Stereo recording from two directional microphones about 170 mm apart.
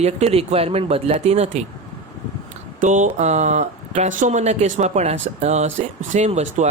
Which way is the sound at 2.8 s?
45° right (ahead or behind).